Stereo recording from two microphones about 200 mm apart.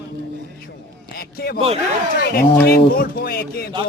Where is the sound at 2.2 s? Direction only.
50° left (ahead or behind).